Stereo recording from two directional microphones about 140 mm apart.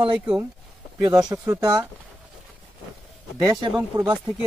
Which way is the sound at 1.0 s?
25° right (ahead or behind).